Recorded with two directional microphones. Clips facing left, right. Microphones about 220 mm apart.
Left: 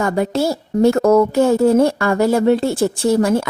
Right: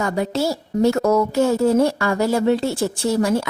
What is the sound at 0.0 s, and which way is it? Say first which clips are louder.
A woman's voice: left 3 dB; 55° left (ahead or behind).